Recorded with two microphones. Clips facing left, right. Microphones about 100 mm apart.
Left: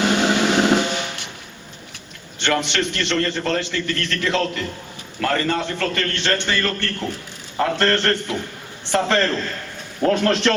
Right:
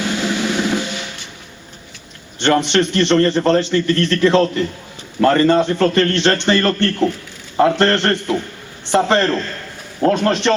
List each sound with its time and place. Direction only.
0.0 s drum: 70° left (ahead or behind)
2.4 s a man's voice: 30° right (ahead or behind)